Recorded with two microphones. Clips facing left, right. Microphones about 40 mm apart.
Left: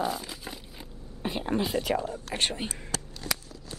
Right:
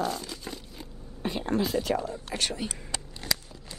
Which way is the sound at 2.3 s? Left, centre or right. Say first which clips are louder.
Left 1 dB; left.